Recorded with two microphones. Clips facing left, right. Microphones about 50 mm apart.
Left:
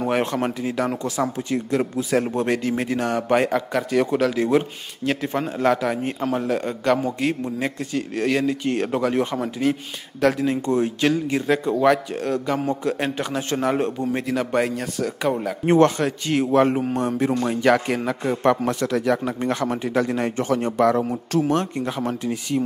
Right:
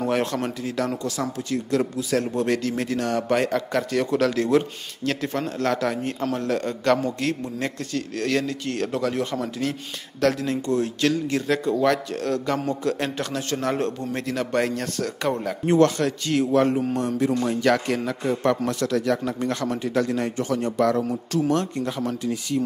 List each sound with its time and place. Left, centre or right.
0.0 s speech: centre
15.6 s speech: left
20.8 s speech: left